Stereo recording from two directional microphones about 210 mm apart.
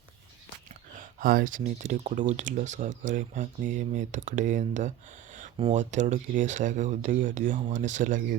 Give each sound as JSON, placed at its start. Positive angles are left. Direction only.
{"t": 0.9, "sound": "speech", "side_deg": -45}